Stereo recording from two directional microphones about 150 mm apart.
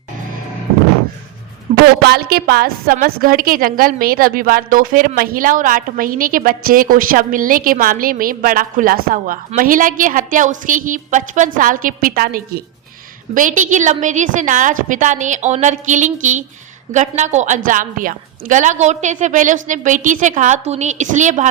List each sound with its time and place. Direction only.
1.7 s a sound: 45° right (ahead or behind)
2.0 s a woman's voice: 90° right
13.3 s a woman's voice: 60° right (ahead or behind)